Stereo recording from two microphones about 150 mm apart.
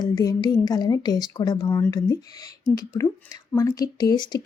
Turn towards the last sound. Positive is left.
turn(degrees=30)  # may be behind; listen again after turning